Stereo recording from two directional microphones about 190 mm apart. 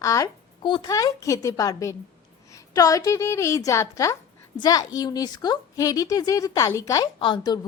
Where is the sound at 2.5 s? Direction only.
20° left (ahead or behind).